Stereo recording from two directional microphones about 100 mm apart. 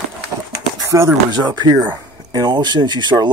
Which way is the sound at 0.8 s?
30° right (ahead or behind).